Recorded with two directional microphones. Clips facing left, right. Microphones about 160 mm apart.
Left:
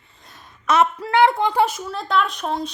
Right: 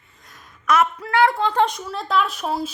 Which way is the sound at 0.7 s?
25° left (ahead or behind).